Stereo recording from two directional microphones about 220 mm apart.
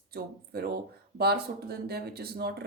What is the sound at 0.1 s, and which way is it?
A woman's voice, 45° right (ahead or behind).